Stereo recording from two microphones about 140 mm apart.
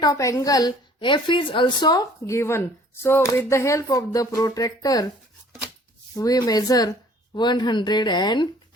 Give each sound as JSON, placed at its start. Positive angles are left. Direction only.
{"t": 0.0, "sound": "a woman's voice", "side_deg": 25}
{"t": 6.1, "sound": "a woman's voice", "side_deg": 25}